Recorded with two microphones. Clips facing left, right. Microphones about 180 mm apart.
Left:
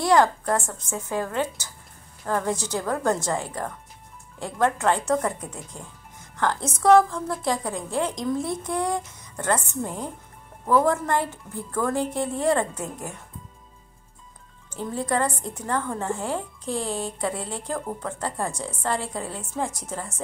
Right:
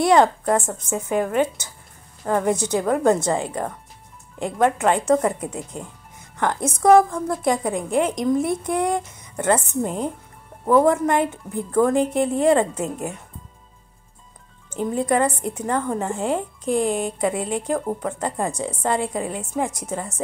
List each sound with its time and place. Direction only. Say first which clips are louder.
0.0 s a woman's voice: right 3 dB; 20° right (ahead or behind)
14.7 s a woman's voice: right 5 dB; 20° right (ahead or behind)